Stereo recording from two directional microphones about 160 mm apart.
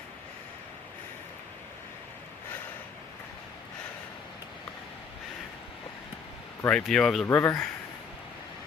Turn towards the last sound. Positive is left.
turn(degrees=15)  # may be behind; listen again after turning